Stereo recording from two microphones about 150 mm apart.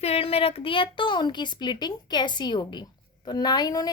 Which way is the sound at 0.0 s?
40° left (ahead or behind).